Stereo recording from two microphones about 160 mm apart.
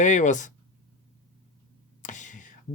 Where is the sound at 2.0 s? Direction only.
50° left (ahead or behind).